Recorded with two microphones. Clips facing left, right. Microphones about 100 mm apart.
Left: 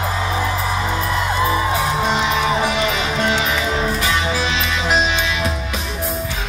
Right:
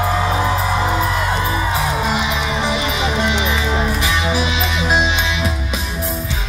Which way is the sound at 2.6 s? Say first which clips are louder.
Even; 20° right (ahead or behind).